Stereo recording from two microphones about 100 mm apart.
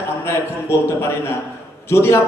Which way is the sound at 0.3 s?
25° left (ahead or behind).